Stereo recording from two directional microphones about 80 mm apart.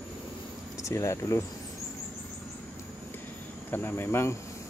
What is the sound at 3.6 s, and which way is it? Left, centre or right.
Speech, left.